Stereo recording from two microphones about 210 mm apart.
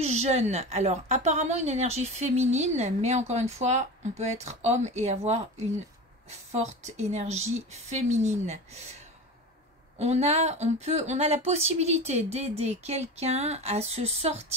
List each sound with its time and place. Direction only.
0.0 s a woman's voice: 30° right (ahead or behind)
6.8 s a woman's voice: 30° right (ahead or behind)
9.9 s a woman's voice: 30° right (ahead or behind)